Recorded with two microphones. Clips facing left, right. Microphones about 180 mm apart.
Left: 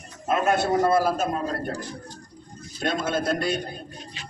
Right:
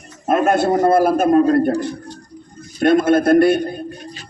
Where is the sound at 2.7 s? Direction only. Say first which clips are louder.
Right 12 dB; 55° right (ahead or behind).